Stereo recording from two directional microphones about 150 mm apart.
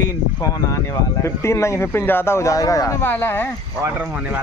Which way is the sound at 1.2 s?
20° left (ahead or behind).